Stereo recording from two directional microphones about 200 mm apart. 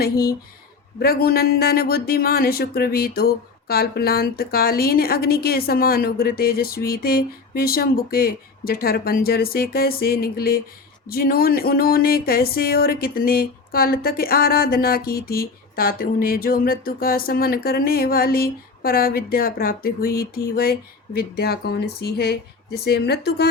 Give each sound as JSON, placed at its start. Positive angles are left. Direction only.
{"t": 0.9, "sound": "speech", "side_deg": 50}